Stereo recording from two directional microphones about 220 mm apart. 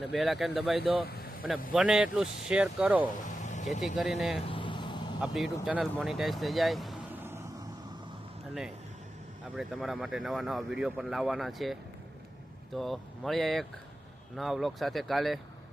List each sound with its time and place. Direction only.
0.1 s speech: centre (ahead or behind)
1.0 s vehicle: 45° left (ahead or behind)
1.5 s speech: 5° right (ahead or behind)
3.2 s vehicle: 35° left (ahead or behind)
3.8 s speech: centre (ahead or behind)
4.4 s a sound: 20° left (ahead or behind)
5.2 s speech: centre (ahead or behind)
9.6 s speech: 5° right (ahead or behind)